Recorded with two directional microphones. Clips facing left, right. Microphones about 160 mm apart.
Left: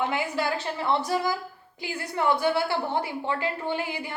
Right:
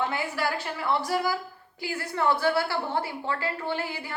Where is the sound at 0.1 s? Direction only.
20° left (ahead or behind).